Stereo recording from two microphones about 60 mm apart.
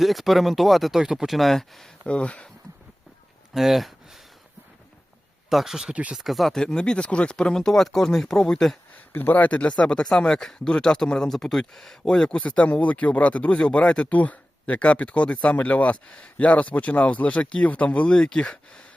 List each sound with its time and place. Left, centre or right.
0.0 s speech: centre
2.0 s speech: centre
3.5 s speech: centre
5.5 s speech: centre
5.9 s speech: right
6.1 s speech: centre
6.6 s speech: centre
9.0 s speech: left; by 18.8 s centre